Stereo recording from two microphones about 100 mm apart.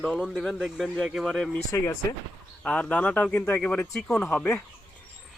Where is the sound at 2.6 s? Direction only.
15° left (ahead or behind).